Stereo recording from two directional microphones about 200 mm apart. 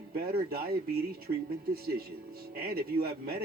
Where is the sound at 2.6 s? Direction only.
50° right (ahead or behind).